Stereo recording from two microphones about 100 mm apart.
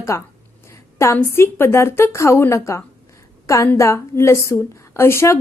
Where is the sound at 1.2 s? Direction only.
25° left (ahead or behind).